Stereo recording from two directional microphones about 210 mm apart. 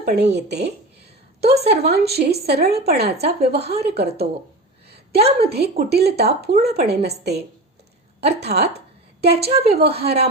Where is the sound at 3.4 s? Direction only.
30° right (ahead or behind).